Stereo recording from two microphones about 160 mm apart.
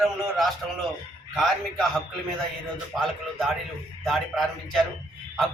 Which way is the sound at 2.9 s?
Centre (ahead or behind).